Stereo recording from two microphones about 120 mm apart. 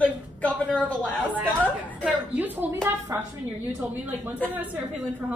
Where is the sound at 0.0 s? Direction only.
10° left (ahead or behind).